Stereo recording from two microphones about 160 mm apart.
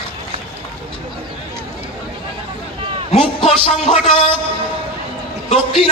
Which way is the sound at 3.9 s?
40° left (ahead or behind).